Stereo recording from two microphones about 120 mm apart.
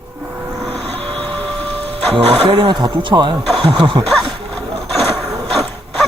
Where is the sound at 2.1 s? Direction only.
50° right (ahead or behind).